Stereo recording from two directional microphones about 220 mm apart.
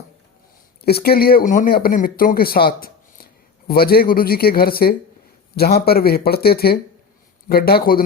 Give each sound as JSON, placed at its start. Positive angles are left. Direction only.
{"t": 0.8, "sound": "speech", "side_deg": 45}